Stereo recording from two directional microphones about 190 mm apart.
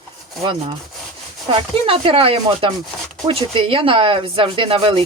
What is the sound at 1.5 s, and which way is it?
Speech, 30° right (ahead or behind).